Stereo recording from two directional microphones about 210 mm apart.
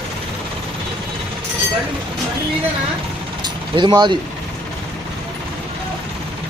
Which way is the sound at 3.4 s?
20° right (ahead or behind).